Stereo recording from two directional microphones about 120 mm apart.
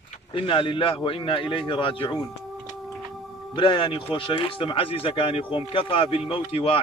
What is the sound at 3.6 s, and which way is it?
Speech, 40° left (ahead or behind).